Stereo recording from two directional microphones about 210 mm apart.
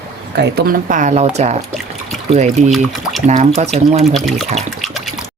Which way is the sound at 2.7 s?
Centre (ahead or behind).